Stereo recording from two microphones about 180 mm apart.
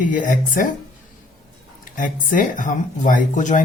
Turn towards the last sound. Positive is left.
turn(degrees=45)  # may be behind; listen again after turning